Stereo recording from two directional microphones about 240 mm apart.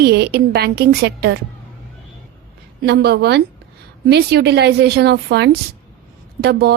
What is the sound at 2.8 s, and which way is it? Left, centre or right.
Speech, right.